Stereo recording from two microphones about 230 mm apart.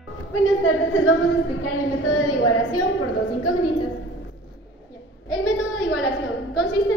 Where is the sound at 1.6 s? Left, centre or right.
Left.